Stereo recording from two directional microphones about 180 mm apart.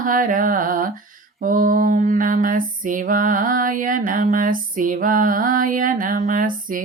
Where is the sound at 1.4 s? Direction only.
50° right (ahead or behind).